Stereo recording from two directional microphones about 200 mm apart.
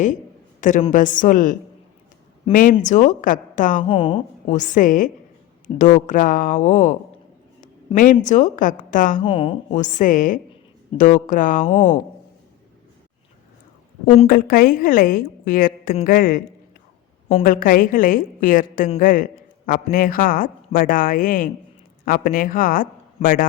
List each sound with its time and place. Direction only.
0.6 s a woman's voice: 40° left (ahead or behind)
3.8 s a woman's voice: 25° left (ahead or behind)
4.4 s a woman's voice: 40° left (ahead or behind)
7.9 s a woman's voice: 40° left (ahead or behind)
9.2 s a woman's voice: 25° left (ahead or behind)
9.7 s a woman's voice: 40° left (ahead or behind)
14.3 s a woman's voice: 45° left (ahead or behind)